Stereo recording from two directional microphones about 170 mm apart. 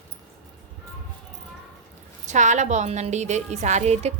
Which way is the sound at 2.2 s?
45° right (ahead or behind).